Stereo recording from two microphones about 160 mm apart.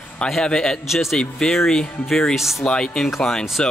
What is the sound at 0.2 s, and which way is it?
Speech, 5° left (ahead or behind).